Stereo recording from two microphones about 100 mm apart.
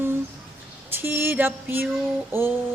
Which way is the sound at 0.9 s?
20° right (ahead or behind).